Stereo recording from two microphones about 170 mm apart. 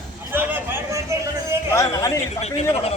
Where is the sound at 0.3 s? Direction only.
10° right (ahead or behind).